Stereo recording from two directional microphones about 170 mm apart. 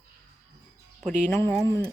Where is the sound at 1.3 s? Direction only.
15° left (ahead or behind).